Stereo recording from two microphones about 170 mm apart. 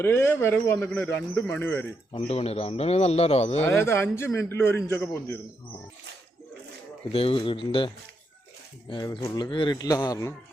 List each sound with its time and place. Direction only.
0.0 s a man's voice: 15° left (ahead or behind)
2.1 s a man's voice: 35° left (ahead or behind)
3.6 s a man's voice: 15° left (ahead or behind)
7.1 s a man's voice: 35° left (ahead or behind)
8.9 s a man's voice: 25° left (ahead or behind)